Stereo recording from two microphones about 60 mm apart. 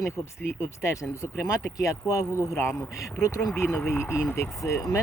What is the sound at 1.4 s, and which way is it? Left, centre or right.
Speech, left.